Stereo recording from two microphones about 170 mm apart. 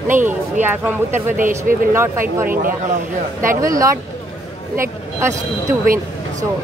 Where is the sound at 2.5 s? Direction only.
55° right (ahead or behind).